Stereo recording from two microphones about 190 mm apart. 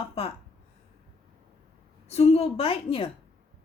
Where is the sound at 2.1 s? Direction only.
35° left (ahead or behind).